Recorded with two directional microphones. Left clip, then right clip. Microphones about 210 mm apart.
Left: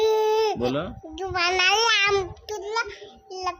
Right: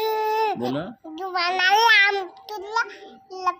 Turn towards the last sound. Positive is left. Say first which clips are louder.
# right 4 dB
turn(degrees=10)  # may be behind; listen again after turning